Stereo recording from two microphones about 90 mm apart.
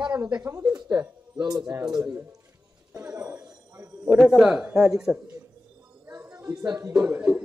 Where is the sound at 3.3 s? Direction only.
15° right (ahead or behind).